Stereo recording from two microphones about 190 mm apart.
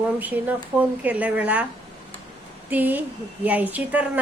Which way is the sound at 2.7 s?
10° right (ahead or behind).